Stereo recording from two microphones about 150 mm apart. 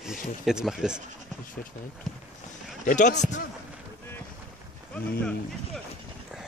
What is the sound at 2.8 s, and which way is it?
Speech, 55° left (ahead or behind).